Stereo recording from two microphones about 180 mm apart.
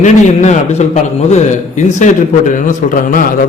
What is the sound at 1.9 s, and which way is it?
A man's voice, 45° left (ahead or behind).